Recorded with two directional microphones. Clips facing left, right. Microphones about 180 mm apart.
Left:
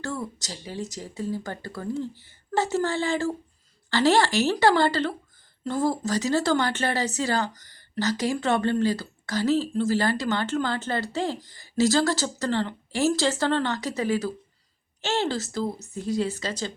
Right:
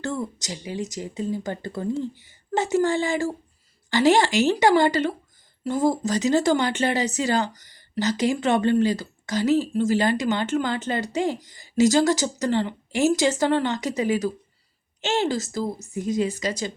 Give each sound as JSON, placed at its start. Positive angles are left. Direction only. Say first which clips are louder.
{"t": 0.0, "sound": "speech", "louder": "right 3 dB", "side_deg": -20}
{"t": 7.5, "sound": "speech", "louder": "right 1 dB", "side_deg": 50}
{"t": 7.8, "sound": "speech", "louder": "right 3 dB", "side_deg": -20}